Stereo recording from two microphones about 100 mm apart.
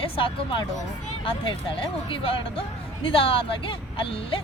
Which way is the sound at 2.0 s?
60° left (ahead or behind).